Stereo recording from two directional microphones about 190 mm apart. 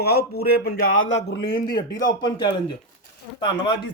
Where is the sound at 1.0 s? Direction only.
75° left (ahead or behind).